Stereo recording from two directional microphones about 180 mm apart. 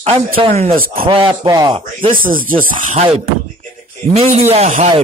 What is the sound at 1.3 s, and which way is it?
Speech, 20° right (ahead or behind).